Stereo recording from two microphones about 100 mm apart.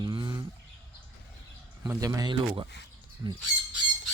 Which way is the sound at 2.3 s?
55° right (ahead or behind).